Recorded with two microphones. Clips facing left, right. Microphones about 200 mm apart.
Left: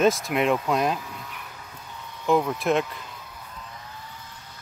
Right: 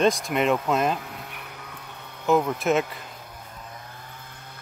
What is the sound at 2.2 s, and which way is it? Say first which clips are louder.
Speech: right 1 dB; centre (ahead or behind).